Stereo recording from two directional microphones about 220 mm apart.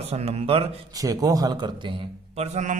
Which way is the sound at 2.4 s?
30° right (ahead or behind).